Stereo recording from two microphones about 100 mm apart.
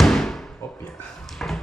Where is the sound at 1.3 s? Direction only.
5° left (ahead or behind).